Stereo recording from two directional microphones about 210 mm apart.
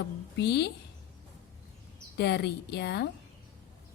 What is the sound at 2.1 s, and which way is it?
Speech, 50° left (ahead or behind).